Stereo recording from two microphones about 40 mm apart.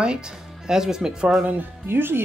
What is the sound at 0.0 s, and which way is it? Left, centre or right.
Speech, right.